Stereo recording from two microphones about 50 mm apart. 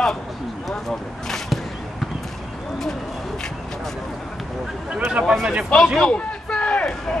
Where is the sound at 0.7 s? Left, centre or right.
Centre.